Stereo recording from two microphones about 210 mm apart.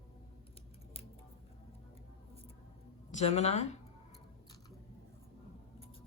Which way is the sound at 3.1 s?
35° left (ahead or behind).